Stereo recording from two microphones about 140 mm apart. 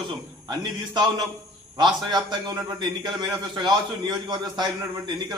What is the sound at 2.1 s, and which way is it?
A man's voice, 30° right (ahead or behind).